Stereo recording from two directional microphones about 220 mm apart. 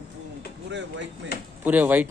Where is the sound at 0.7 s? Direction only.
55° right (ahead or behind).